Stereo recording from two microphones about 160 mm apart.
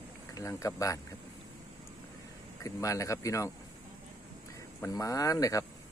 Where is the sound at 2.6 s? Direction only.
20° left (ahead or behind).